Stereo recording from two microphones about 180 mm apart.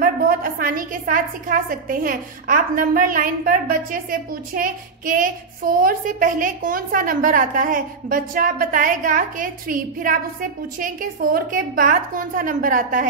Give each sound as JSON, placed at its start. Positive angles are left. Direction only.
{"t": 0.0, "sound": "a woman's voice", "side_deg": -55}